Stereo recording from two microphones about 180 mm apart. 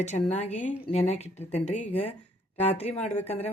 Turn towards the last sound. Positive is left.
turn(degrees=35)  # may be behind; listen again after turning